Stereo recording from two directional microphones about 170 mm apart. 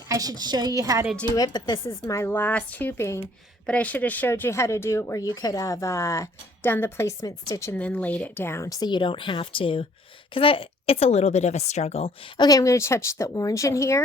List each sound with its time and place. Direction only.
0.1 s a woman's voice: 20° right (ahead or behind)
1.4 s a woman's voice: 25° left (ahead or behind)
12.5 s speech: 20° left (ahead or behind)